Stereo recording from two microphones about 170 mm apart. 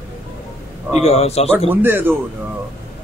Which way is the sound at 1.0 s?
40° left (ahead or behind).